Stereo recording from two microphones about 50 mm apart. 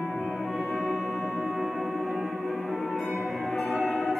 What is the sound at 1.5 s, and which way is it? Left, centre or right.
Music, left.